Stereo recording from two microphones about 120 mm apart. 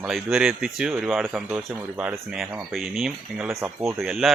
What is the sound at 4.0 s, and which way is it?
Speech, 5° right (ahead or behind).